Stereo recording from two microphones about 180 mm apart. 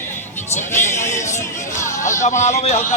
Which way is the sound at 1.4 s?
15° left (ahead or behind).